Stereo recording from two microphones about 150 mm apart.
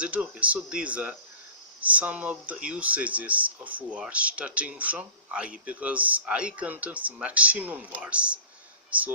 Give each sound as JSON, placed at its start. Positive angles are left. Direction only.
{"t": 0.0, "sound": "speech", "side_deg": -10}